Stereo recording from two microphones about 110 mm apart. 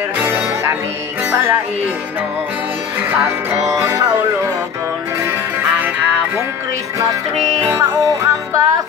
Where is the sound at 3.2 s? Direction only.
30° right (ahead or behind).